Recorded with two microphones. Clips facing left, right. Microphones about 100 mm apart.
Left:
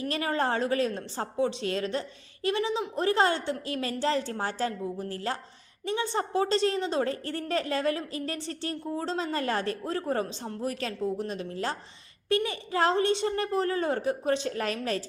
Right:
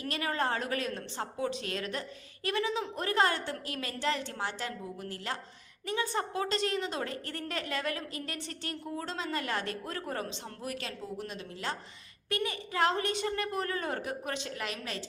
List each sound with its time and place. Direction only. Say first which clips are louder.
0.0 s a woman's voice: left 4 dB; 25° left (ahead or behind)